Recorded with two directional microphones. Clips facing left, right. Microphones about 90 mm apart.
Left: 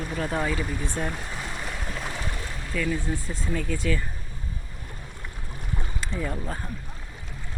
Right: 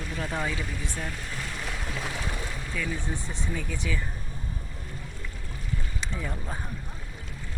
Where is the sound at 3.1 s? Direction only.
25° right (ahead or behind).